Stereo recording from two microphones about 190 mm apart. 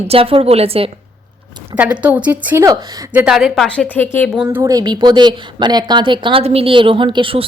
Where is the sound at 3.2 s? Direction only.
Centre (ahead or behind).